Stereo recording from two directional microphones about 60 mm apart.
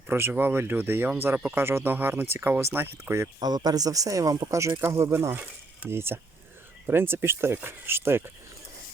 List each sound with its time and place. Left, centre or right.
0.1 s speech: right
3.4 s speech: right